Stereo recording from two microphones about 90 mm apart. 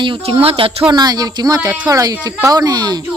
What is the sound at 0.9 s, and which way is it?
Speech, 50° right (ahead or behind).